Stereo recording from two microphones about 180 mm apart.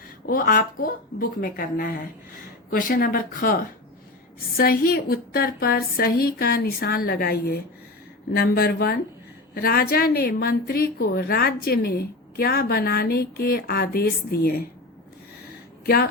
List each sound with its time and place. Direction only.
0.3 s a woman's voice: 50° left (ahead or behind)